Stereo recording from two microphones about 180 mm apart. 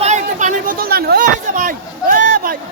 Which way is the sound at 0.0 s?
40° right (ahead or behind).